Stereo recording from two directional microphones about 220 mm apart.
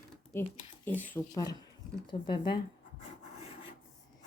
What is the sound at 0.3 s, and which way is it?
Speech, 10° left (ahead or behind).